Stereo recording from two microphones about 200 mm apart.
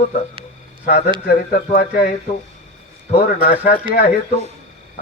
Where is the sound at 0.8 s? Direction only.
50° left (ahead or behind).